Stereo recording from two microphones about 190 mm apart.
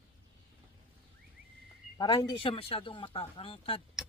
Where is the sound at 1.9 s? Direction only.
20° left (ahead or behind).